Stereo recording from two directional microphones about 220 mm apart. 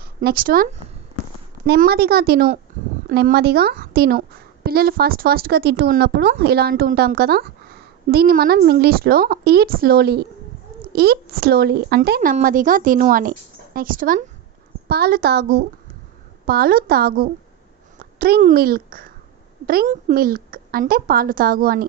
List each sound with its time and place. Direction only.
0.0 s speech: 45° right (ahead or behind)
1.7 s a woman's voice: 45° right (ahead or behind)